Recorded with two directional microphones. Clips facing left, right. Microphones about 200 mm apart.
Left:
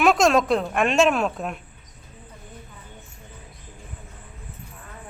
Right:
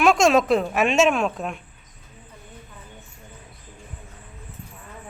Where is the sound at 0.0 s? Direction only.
Centre (ahead or behind).